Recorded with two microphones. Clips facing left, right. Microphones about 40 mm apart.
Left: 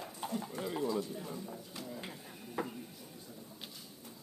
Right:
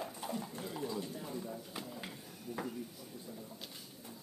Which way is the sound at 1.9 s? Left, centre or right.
Centre.